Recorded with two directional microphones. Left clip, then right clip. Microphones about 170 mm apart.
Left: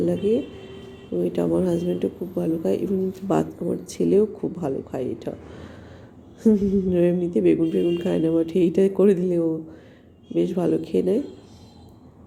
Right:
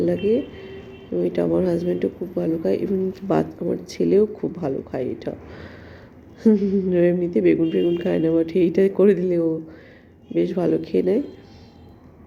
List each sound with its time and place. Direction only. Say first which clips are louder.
0.0 s speech: right 2 dB; 10° left (ahead or behind)